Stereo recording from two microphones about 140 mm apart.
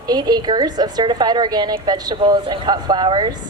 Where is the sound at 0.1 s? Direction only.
30° right (ahead or behind).